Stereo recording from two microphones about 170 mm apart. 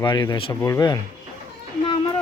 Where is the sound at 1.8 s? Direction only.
35° left (ahead or behind).